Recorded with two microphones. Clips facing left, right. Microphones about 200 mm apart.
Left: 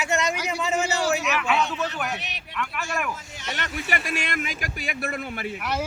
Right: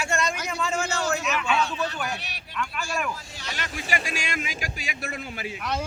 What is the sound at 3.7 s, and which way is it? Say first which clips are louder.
Speech: left 1 dB; 60° left (ahead or behind).